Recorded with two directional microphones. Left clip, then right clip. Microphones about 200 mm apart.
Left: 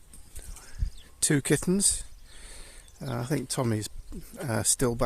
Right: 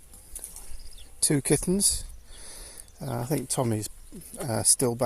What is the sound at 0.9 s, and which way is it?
Cricket, 15° left (ahead or behind).